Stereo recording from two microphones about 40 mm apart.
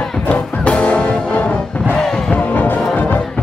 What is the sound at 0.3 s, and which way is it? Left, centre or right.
Music, left.